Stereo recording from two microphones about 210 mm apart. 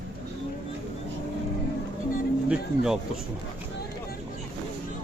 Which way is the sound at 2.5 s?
5° right (ahead or behind).